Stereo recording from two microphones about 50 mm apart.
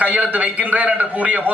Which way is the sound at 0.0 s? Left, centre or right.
Right.